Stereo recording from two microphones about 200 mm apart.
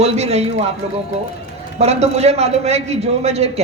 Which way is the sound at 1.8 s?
30° right (ahead or behind).